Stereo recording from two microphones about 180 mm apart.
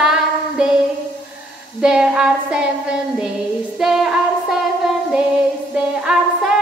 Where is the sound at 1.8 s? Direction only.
5° right (ahead or behind).